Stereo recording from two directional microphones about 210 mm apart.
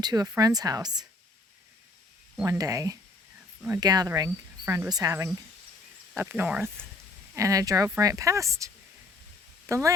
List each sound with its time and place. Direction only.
0.0 s speech: 20° right (ahead or behind)
2.3 s speech: 15° right (ahead or behind)